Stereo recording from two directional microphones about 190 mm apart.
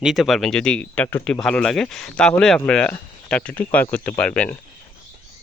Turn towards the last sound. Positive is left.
turn(degrees=5)  # may be behind; listen again after turning